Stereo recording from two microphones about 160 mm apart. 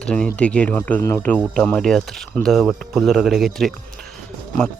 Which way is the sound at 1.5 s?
5° left (ahead or behind).